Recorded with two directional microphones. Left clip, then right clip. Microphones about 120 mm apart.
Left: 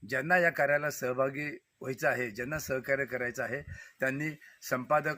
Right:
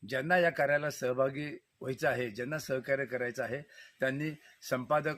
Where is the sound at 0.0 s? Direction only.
15° right (ahead or behind).